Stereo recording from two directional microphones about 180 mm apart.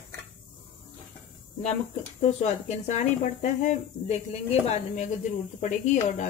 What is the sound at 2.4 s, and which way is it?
Speech, 40° left (ahead or behind).